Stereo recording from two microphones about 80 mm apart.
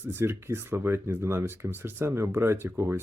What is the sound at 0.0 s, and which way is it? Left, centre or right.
Speech, right.